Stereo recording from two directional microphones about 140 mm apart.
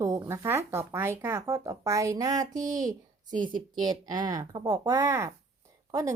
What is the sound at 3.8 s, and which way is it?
A woman's voice, 30° right (ahead or behind).